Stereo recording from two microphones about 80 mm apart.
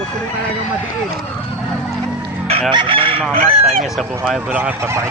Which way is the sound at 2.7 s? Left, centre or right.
Right.